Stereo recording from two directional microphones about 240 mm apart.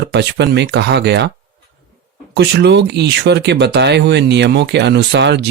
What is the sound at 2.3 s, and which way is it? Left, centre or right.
Speech, right.